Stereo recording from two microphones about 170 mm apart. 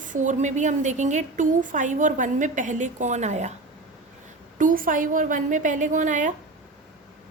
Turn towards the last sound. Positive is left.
turn(degrees=-45)  # may be behind; listen again after turning